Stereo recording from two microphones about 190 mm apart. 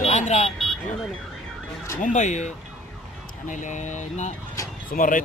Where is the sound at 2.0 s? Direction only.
40° left (ahead or behind).